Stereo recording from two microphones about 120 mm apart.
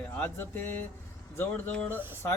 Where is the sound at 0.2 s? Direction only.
15° left (ahead or behind).